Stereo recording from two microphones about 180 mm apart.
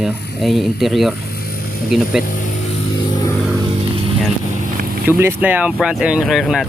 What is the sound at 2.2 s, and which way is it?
Speech, 50° left (ahead or behind).